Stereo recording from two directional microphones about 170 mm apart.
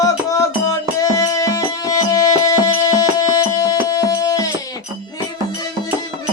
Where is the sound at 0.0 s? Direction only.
20° left (ahead or behind).